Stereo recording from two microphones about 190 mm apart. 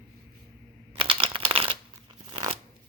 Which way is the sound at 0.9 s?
30° right (ahead or behind).